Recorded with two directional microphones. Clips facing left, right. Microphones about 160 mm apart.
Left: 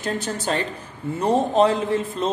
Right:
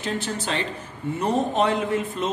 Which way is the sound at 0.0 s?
45° left (ahead or behind).